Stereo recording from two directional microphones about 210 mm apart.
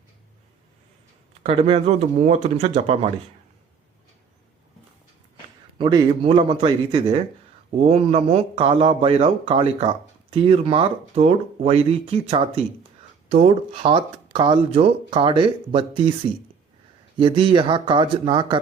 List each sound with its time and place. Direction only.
1.5 s a man's voice: 30° right (ahead or behind)
5.7 s a man's voice: 20° right (ahead or behind)
17.2 s a man's voice: 25° right (ahead or behind)